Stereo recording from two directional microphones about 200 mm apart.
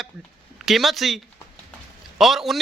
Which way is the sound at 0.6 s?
Centre (ahead or behind).